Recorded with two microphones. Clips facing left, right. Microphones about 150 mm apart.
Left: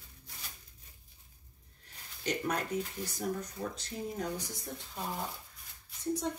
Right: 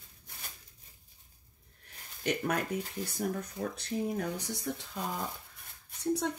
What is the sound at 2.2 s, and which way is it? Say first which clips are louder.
Speech: right 2 dB; 60° right (ahead or behind).